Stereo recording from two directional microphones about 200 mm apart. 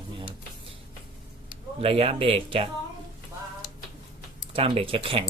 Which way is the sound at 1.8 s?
30° right (ahead or behind).